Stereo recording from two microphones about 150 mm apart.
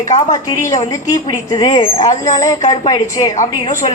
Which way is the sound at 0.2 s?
25° left (ahead or behind).